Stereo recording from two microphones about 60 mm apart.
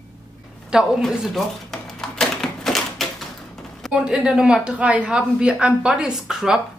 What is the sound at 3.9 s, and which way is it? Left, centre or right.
A woman's voice, centre.